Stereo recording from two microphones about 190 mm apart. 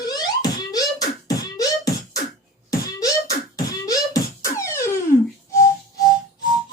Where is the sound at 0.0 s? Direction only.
20° left (ahead or behind).